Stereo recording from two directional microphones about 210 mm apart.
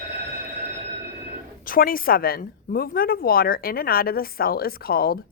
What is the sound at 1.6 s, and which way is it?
A woman's voice, 40° left (ahead or behind).